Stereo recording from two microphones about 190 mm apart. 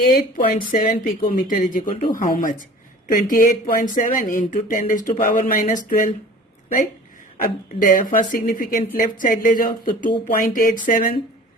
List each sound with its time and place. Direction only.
0.2 s speech: 45° left (ahead or behind)
7.4 s speech: 45° left (ahead or behind)